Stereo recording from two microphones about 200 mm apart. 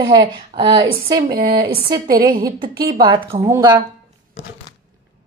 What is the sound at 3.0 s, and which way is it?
Speech, 25° right (ahead or behind).